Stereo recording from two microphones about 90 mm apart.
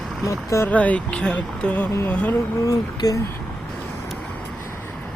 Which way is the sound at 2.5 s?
40° left (ahead or behind).